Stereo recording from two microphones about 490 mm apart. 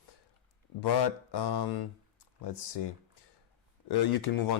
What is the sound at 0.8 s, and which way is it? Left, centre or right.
Speech, left.